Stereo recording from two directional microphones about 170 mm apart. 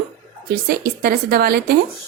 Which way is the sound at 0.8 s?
60° right (ahead or behind).